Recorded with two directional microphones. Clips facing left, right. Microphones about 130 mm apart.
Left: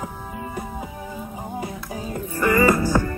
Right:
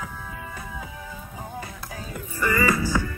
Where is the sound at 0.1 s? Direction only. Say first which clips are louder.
Left 6 dB; 40° left (ahead or behind).